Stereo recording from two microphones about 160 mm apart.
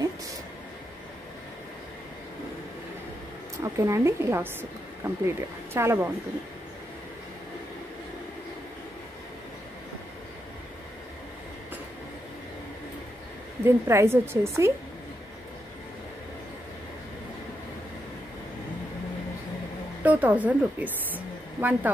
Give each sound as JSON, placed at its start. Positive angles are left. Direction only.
{"t": 3.6, "sound": "a woman's voice", "side_deg": -20}
{"t": 13.7, "sound": "a woman's voice", "side_deg": -15}
{"t": 20.0, "sound": "a woman's voice", "side_deg": -10}